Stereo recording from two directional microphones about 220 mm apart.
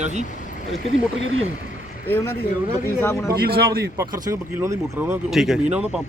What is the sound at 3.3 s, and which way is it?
Speech, 45° right (ahead or behind).